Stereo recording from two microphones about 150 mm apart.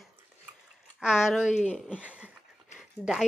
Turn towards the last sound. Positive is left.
turn(degrees=-5)  # may be behind; listen again after turning